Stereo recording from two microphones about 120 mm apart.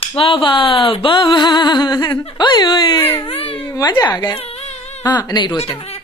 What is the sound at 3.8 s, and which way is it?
Speech, 35° left (ahead or behind).